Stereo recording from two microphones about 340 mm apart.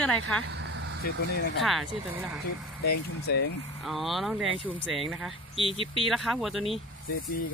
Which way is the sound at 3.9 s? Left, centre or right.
Centre.